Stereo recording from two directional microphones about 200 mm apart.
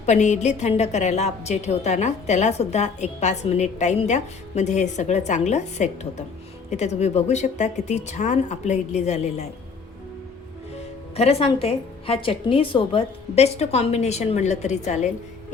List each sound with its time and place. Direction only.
0.0 s a woman's voice: 35° left (ahead or behind)
10.8 s a woman's voice: 30° left (ahead or behind)